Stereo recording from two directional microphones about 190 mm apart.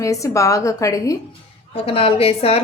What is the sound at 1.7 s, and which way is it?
Speech, 30° left (ahead or behind).